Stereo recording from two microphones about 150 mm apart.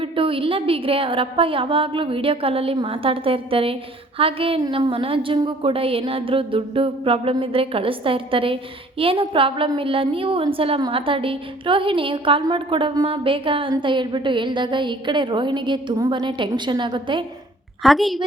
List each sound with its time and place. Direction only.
0.0 s a woman's voice: 35° right (ahead or behind)
17.8 s a woman's voice: centre (ahead or behind)